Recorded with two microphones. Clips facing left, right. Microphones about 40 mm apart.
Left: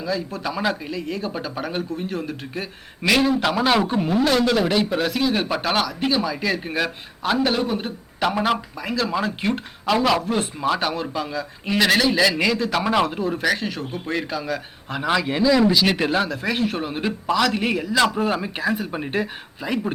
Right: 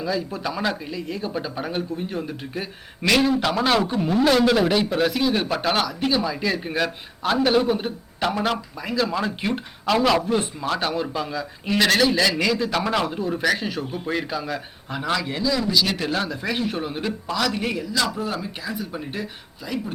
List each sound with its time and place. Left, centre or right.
0.0 s speech: centre
3.0 s speech: centre
4.2 s speech: centre
8.2 s speech: centre
14.9 s a man's voice: centre
16.2 s a man's voice: centre; by 18.0 s left
18.2 s speech: left